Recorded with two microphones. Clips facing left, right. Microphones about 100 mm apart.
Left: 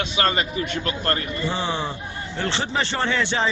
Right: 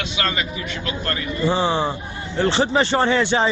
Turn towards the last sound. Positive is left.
turn(degrees=-15)  # may be behind; listen again after turning